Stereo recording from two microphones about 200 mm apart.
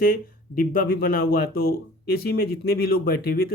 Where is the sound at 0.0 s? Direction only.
45° left (ahead or behind).